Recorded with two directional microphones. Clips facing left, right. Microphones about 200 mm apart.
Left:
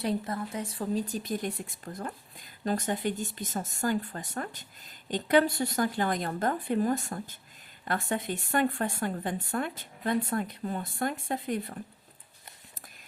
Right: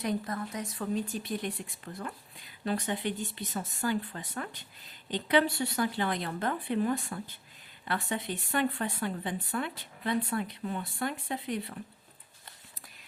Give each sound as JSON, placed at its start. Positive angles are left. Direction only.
{"t": 0.0, "sound": "speech", "side_deg": 30}